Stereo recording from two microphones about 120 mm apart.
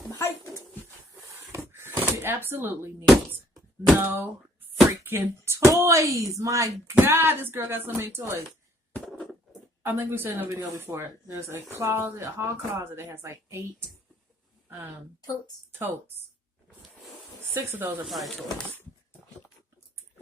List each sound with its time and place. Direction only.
0.1 s dog: 25° left (ahead or behind)
1.3 s door: 20° right (ahead or behind)
4.0 s speech: 15° right (ahead or behind)
8.9 s a sound: 5° left (ahead or behind)
9.8 s speech: 20° right (ahead or behind)
17.5 s speech: 20° right (ahead or behind)
18.1 s speech: centre (ahead or behind)